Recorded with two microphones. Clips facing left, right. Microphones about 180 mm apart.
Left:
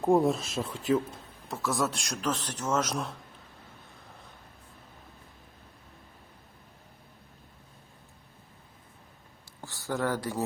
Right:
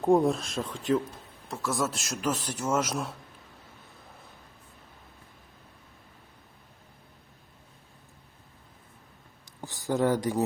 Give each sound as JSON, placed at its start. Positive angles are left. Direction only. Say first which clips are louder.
{"t": 0.0, "sound": "a man's voice", "louder": "right 1 dB", "side_deg": 0}
{"t": 9.6, "sound": "speech", "louder": "right 5 dB", "side_deg": -15}